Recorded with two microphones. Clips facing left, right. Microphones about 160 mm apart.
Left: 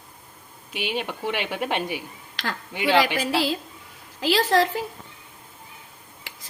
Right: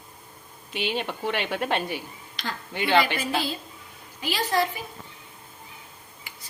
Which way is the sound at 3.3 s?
90° left.